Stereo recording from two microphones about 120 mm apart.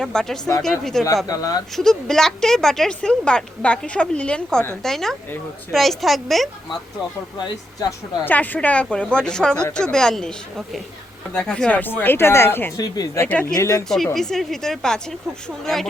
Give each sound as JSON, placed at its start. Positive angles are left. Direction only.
{"t": 0.0, "sound": "a woman's voice", "side_deg": 5}
{"t": 1.3, "sound": "speech", "side_deg": 30}
{"t": 1.7, "sound": "a woman's voice", "side_deg": 5}
{"t": 7.9, "sound": "a woman's voice", "side_deg": 15}
{"t": 11.3, "sound": "a woman's voice", "side_deg": 5}
{"t": 12.7, "sound": "speech", "side_deg": 30}
{"t": 13.2, "sound": "a woman's voice", "side_deg": 10}
{"t": 13.5, "sound": "speech", "side_deg": 25}
{"t": 13.8, "sound": "a woman's voice", "side_deg": 5}